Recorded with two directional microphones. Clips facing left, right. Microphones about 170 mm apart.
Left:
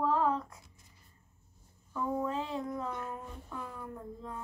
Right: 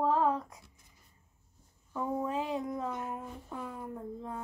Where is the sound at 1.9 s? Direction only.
15° right (ahead or behind).